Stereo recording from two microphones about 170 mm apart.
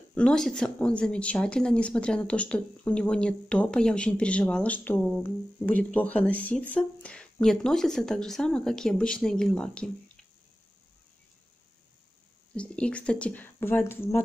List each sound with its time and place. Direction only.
0.1 s speech: 5° left (ahead or behind)
12.5 s speech: 5° left (ahead or behind)